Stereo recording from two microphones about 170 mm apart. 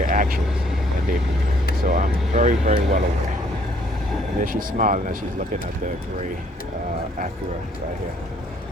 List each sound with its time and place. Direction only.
0.0 s vehicle: 50° right (ahead or behind)
1.8 s speech: 50° right (ahead or behind)
4.4 s speech: 55° right (ahead or behind)